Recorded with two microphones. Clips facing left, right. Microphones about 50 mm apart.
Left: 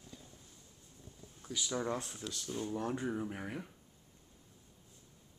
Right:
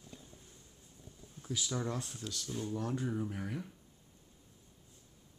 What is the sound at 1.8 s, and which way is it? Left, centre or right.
Speech, centre.